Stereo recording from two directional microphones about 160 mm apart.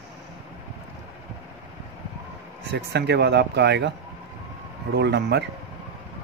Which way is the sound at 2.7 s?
90° right.